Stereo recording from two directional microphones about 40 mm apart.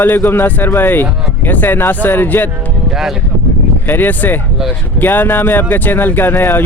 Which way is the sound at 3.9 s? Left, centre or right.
Left.